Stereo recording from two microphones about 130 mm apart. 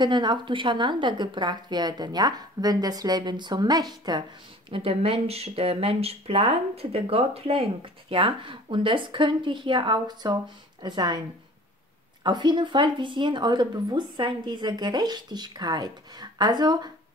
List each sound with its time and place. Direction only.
0.0 s a woman's voice: 35° right (ahead or behind)
4.6 s a woman's voice: 45° right (ahead or behind)
12.2 s a woman's voice: 35° right (ahead or behind)